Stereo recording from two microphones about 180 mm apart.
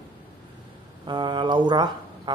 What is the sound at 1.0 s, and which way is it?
Speech, 25° right (ahead or behind).